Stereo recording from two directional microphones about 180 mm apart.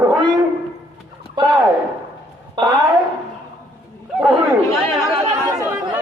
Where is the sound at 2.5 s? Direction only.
25° right (ahead or behind).